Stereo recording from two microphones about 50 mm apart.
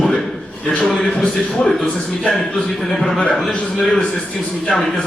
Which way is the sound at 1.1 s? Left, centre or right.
Centre.